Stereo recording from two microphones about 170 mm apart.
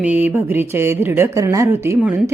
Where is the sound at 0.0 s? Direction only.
10° right (ahead or behind).